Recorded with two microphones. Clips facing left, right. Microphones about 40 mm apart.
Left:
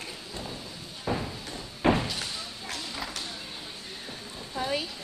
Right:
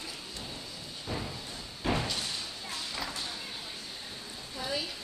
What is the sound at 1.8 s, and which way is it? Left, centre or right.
Door, left.